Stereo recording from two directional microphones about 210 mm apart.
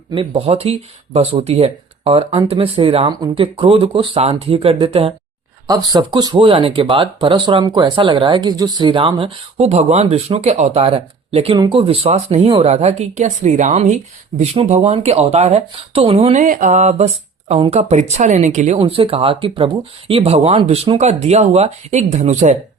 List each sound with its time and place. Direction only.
0.1 s speech: 25° right (ahead or behind)